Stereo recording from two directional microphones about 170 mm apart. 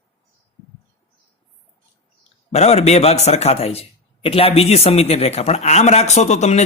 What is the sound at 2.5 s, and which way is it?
A man's voice, 40° left (ahead or behind).